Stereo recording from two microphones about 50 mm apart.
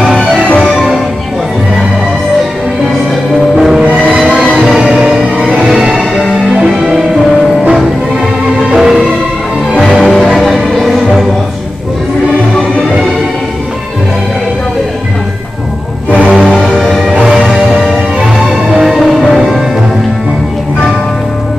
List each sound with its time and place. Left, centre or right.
0.0 s music: centre
3.5 s music: centre
5.0 s music: centre
8.6 s music: centre
16.1 s music: centre
17.2 s music: centre
18.7 s music: centre
18.9 s music: centre